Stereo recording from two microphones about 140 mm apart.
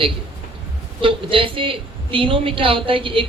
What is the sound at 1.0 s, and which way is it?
A woman's voice, 40° right (ahead or behind).